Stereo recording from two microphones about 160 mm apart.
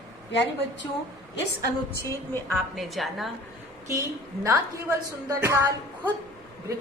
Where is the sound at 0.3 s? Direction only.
90° left.